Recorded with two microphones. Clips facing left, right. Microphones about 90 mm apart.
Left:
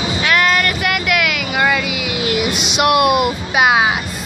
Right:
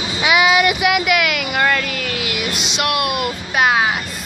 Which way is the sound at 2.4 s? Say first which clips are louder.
Left 5 dB; 20° left (ahead or behind).